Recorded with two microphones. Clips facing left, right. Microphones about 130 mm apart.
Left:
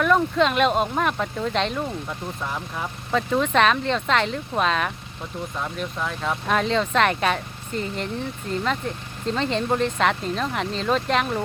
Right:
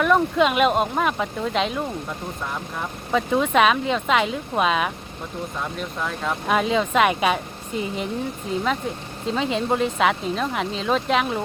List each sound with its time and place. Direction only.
0.0 s speech: 5° right (ahead or behind)